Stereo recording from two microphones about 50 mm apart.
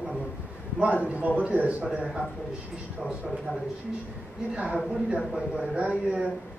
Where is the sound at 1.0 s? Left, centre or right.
Right.